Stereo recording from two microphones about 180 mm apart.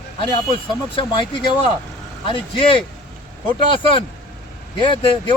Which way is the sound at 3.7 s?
30° left (ahead or behind).